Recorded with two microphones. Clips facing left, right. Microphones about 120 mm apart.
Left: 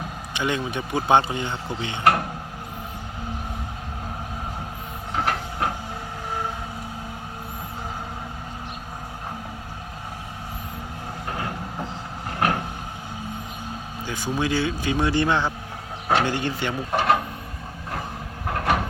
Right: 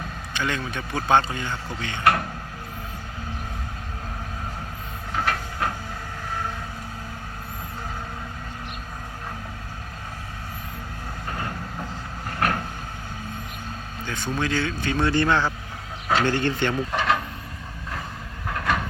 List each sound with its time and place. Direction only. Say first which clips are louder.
0.3 s speech: left 3 dB; 20° left (ahead or behind)
5.1 s train: left 1 dB; 20° left (ahead or behind)
12.4 s vehicle: left 2 dB; 15° left (ahead or behind)
14.0 s speech: left 1 dB; 10° left (ahead or behind)
16.9 s vehicle: left 6 dB; 50° left (ahead or behind)
18.4 s a sound: left 2 dB; 55° left (ahead or behind)